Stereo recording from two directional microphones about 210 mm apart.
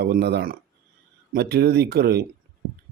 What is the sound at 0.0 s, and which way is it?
Speech, 50° right (ahead or behind).